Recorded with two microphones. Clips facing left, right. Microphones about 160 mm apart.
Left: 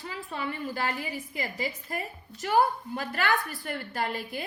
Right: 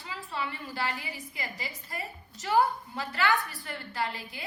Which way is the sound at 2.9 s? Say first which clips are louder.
Even; 50° left (ahead or behind).